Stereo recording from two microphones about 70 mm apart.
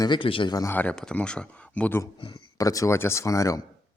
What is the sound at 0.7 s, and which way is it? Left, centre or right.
Speech, left.